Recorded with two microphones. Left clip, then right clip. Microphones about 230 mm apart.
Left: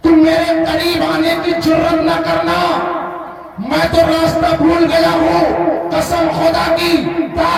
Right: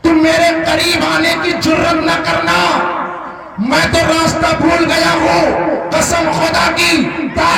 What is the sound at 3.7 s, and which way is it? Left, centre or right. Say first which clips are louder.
Speech: even; right.